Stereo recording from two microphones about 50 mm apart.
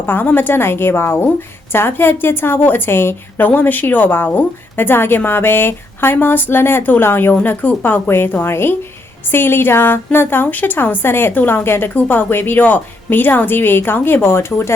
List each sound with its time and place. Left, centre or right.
0.0 s a woman's voice: left
7.4 s a woman's voice: left
8.4 s a woman's voice: left
11.9 s a woman's voice: left